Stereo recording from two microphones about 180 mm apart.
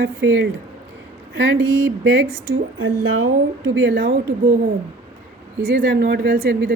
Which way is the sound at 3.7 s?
90° right.